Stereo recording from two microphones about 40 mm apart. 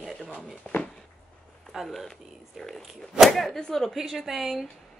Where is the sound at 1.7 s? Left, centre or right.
Centre.